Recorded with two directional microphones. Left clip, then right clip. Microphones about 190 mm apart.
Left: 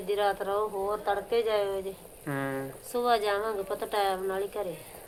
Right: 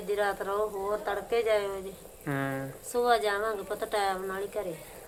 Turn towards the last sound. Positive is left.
turn(degrees=10)  # may be behind; listen again after turning